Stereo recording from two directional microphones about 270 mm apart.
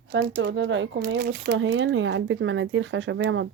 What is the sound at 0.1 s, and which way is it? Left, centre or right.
Speech, right.